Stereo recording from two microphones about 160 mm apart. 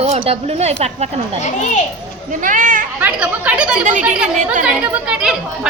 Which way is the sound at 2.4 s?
55° right (ahead or behind).